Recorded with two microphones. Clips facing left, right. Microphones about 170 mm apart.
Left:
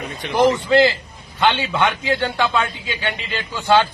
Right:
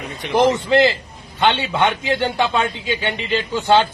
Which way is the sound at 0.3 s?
20° right (ahead or behind).